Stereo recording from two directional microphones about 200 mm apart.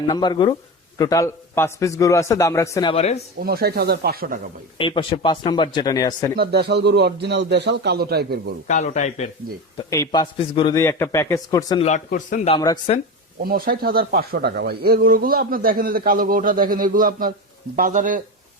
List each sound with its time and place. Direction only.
0.1 s a man's voice: 20° left (ahead or behind)
2.9 s speech: 30° left (ahead or behind)
3.4 s speech: 50° right (ahead or behind)
4.8 s speech: 25° left (ahead or behind)
6.3 s a man's voice: 50° right (ahead or behind)
8.6 s speech: 35° left (ahead or behind)
9.7 s speech: 20° left (ahead or behind)
10.8 s a man's voice: 15° left (ahead or behind)
11.8 s speech: 35° left (ahead or behind)
12.5 s speech: 20° left (ahead or behind)
13.4 s speech: 50° right (ahead or behind)